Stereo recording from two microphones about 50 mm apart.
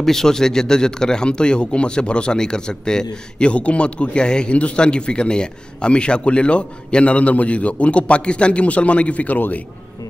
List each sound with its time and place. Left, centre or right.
0.0 s speech: centre; by 9.4 s left